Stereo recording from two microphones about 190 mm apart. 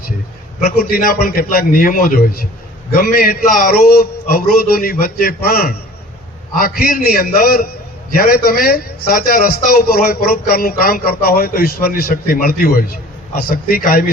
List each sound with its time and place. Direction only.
0.6 s a man's voice: 50° left (ahead or behind)